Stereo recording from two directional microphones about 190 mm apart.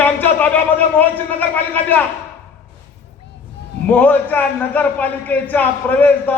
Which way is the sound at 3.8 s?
10° left (ahead or behind).